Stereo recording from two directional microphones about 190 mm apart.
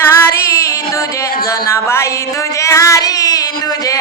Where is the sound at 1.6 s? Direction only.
15° left (ahead or behind).